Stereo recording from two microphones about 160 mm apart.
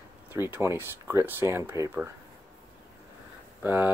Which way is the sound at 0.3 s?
15° right (ahead or behind).